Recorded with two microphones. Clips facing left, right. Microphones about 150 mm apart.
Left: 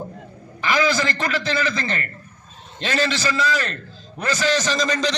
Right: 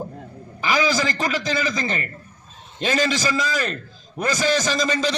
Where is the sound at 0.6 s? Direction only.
10° right (ahead or behind).